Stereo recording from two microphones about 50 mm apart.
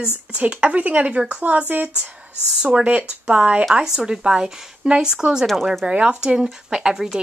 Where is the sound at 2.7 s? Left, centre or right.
Right.